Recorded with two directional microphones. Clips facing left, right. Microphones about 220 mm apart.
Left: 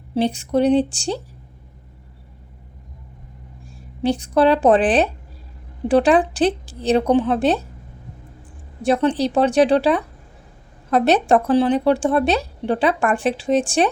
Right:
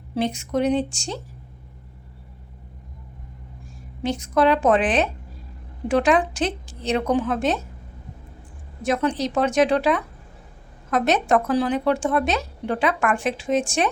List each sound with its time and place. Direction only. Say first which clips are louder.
0.1 s speech: left 4 dB; 30° left (ahead or behind)
4.0 s speech: left 4 dB; 30° left (ahead or behind)
8.8 s speech: left 5 dB; 30° left (ahead or behind)